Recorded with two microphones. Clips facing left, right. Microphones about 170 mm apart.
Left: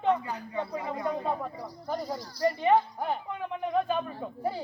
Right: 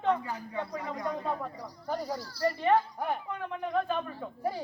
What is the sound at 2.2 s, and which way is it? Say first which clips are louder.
Speech: left 5 dB; 15° left (ahead or behind).